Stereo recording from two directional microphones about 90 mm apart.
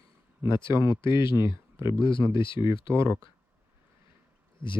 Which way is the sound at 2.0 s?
70° left (ahead or behind).